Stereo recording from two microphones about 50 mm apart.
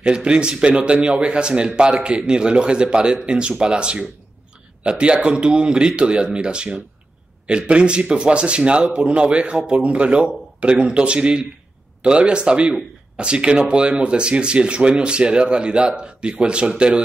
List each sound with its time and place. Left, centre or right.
0.0 s speech: right